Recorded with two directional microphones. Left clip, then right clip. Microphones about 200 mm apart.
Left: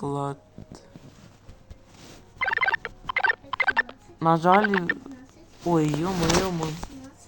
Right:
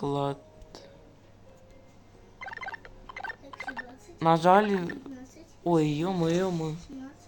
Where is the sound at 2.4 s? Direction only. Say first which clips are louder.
Left 15 dB; 35° left (ahead or behind).